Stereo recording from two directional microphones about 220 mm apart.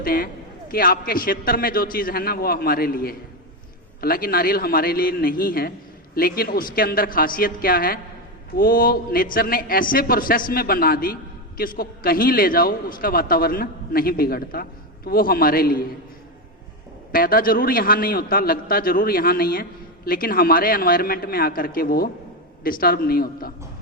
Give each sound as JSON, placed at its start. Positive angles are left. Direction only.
{"t": 0.0, "sound": "a man's voice", "side_deg": 40}
{"t": 17.1, "sound": "a man's voice", "side_deg": 40}